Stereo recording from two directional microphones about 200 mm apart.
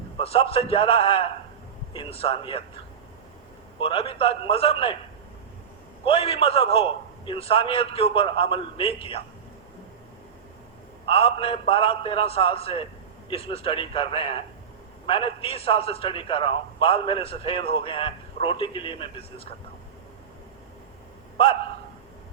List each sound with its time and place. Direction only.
0.2 s a man's voice: 30° left (ahead or behind)
3.8 s a man's voice: 25° left (ahead or behind)
6.1 s a man's voice: 25° left (ahead or behind)
11.0 s a man's voice: 25° left (ahead or behind)